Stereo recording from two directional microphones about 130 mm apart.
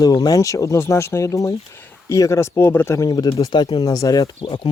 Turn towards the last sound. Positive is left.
turn(degrees=35)  # may be behind; listen again after turning